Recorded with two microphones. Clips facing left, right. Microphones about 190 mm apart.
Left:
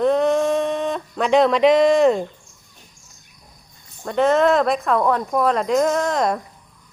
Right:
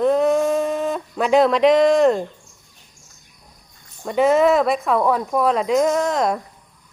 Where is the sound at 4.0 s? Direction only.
5° right (ahead or behind).